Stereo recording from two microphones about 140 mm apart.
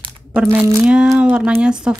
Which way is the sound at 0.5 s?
25° right (ahead or behind).